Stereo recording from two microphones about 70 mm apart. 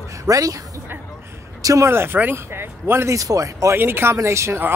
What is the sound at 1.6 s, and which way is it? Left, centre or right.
Speech, right.